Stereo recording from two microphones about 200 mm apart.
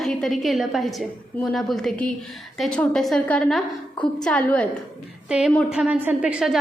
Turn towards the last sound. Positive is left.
turn(degrees=-5)  # may be behind; listen again after turning